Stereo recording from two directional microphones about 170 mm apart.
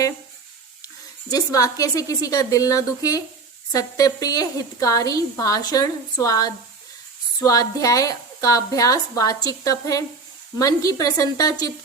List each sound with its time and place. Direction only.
1.3 s a woman's voice: 20° left (ahead or behind)